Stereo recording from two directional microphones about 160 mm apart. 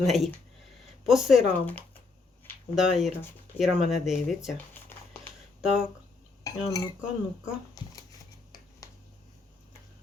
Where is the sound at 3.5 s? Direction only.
10° left (ahead or behind).